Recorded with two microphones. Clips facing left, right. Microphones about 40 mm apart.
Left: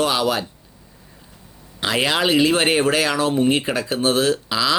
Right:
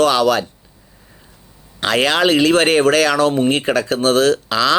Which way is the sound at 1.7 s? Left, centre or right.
Right.